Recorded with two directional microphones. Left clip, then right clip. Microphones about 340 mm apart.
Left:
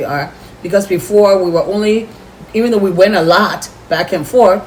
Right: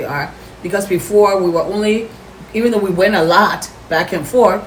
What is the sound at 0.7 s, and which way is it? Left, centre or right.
Speech, centre.